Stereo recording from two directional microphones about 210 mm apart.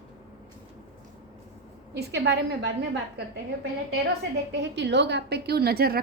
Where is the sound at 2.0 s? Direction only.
55° right (ahead or behind).